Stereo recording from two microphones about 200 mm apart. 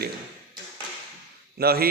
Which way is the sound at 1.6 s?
50° right (ahead or behind).